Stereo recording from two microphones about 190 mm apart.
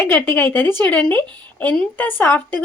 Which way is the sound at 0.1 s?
10° left (ahead or behind).